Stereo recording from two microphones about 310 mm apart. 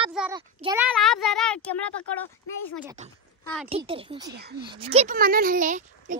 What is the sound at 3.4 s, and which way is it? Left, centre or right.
Speech, centre.